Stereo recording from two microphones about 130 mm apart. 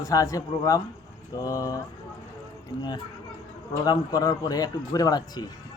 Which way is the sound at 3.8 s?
30° left (ahead or behind).